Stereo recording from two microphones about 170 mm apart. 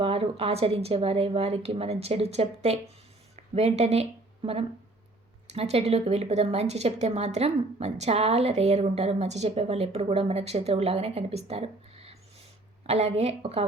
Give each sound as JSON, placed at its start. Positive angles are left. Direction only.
{"t": 0.0, "sound": "a woman's voice", "side_deg": -35}
{"t": 5.5, "sound": "a woman's voice", "side_deg": -40}